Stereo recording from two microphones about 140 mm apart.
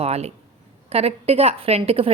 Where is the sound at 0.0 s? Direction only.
50° right (ahead or behind).